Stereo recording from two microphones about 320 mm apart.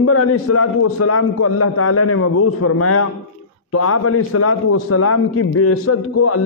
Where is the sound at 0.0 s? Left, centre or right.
Left.